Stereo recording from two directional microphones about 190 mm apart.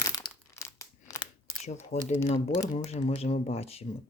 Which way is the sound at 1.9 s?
35° left (ahead or behind).